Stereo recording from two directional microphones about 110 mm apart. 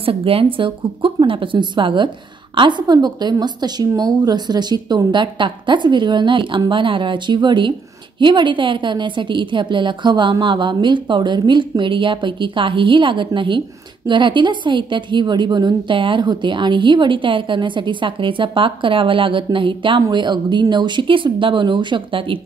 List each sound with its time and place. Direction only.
0.0 s a woman's voice: 55° right (ahead or behind)